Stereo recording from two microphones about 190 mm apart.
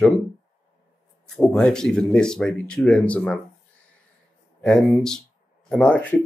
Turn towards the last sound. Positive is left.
turn(degrees=5)  # may be behind; listen again after turning